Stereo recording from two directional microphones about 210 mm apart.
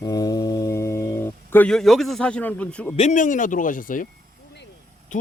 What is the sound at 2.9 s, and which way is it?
Speech, 35° left (ahead or behind).